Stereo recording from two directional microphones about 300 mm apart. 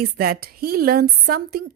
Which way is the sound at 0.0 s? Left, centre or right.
Right.